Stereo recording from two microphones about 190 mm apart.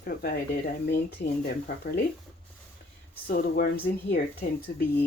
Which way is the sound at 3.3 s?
50° left (ahead or behind).